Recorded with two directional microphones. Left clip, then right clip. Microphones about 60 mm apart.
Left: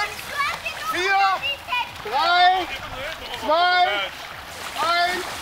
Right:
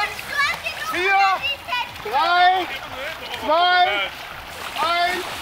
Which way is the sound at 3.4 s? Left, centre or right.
Left.